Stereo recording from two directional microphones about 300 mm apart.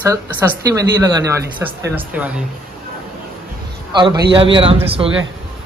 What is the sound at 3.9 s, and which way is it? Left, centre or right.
A man's voice, centre.